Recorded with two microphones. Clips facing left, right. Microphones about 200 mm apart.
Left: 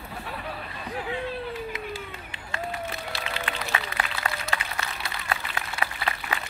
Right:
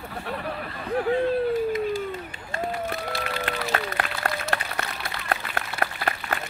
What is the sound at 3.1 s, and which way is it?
Applause, 50° right (ahead or behind).